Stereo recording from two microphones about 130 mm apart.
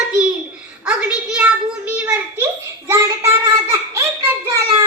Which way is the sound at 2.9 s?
20° right (ahead or behind).